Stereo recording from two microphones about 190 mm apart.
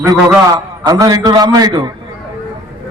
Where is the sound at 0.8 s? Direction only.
20° right (ahead or behind).